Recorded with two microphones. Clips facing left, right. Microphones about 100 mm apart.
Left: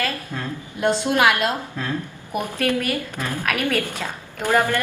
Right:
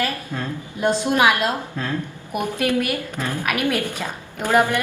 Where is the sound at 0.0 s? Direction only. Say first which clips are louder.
Right 1 dB; 10° right (ahead or behind).